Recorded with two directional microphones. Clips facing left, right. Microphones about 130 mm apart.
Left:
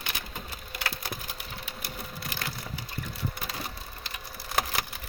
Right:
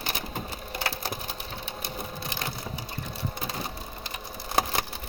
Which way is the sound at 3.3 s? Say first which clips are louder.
Right 3 dB; 25° right (ahead or behind).